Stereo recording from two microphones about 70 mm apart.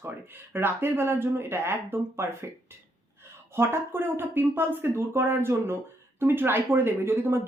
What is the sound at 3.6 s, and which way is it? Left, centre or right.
A woman's voice, right.